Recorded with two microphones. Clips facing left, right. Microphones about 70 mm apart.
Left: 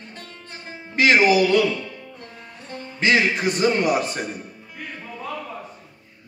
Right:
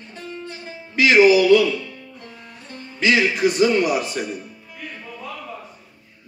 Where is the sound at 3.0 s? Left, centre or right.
Left.